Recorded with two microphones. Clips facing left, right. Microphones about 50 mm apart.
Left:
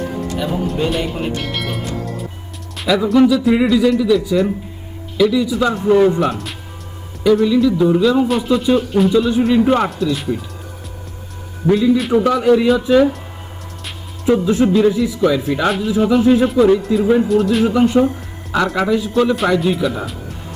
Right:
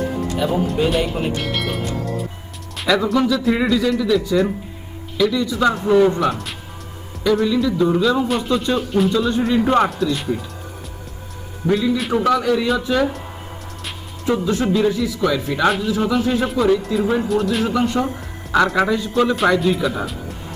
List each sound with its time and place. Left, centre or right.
0.2 s speech: centre
5.9 s a man's voice: centre
6.1 s speech: centre
7.8 s a man's voice: centre
8.3 s speech: centre
11.6 s a man's voice: centre
14.3 s a man's voice: centre
15.4 s a man's voice: centre
17.7 s a man's voice: centre
18.2 s speech: centre